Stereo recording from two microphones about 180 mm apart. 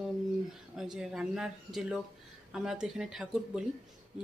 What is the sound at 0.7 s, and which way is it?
Speech, 5° right (ahead or behind).